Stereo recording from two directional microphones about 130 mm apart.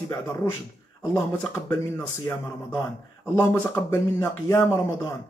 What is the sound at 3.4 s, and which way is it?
A man's voice, 20° left (ahead or behind).